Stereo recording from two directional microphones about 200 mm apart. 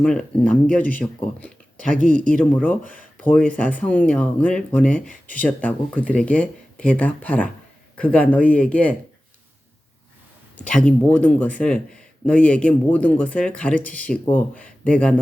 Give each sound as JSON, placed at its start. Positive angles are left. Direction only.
{"t": 0.0, "sound": "speech", "side_deg": 5}
{"t": 2.0, "sound": "speech", "side_deg": -40}
{"t": 2.2, "sound": "speech", "side_deg": 5}
{"t": 10.6, "sound": "speech", "side_deg": 5}